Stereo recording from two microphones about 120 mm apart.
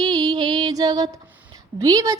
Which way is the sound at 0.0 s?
35° right (ahead or behind).